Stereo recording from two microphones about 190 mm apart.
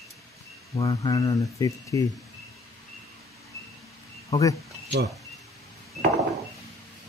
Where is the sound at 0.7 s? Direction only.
20° left (ahead or behind).